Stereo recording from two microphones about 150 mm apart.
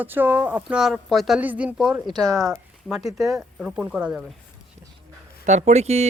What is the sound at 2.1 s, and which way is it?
Speech, 25° right (ahead or behind).